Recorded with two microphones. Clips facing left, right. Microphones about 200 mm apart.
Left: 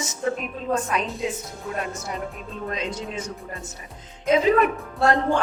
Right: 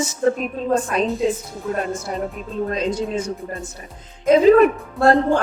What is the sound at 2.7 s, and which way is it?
Speech, 35° right (ahead or behind).